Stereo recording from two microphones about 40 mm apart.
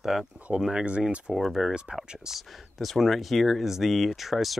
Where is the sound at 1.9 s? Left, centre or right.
Centre.